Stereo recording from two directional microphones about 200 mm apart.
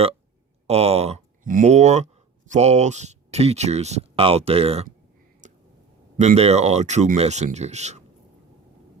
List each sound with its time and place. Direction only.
0.7 s speech: 30° right (ahead or behind)
5.4 s a sound: 40° right (ahead or behind)
6.1 s speech: 30° right (ahead or behind)